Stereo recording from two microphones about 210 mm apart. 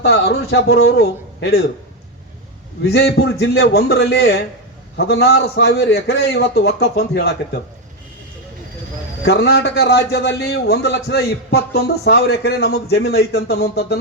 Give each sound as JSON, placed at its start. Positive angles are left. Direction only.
{"t": 0.0, "sound": "a man's voice", "side_deg": 50}
{"t": 2.8, "sound": "a man's voice", "side_deg": 55}
{"t": 9.2, "sound": "a man's voice", "side_deg": 55}